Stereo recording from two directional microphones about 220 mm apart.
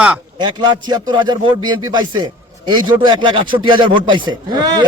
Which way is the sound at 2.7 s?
20° right (ahead or behind).